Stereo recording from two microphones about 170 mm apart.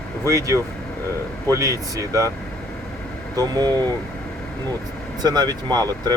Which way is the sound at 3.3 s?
20° right (ahead or behind).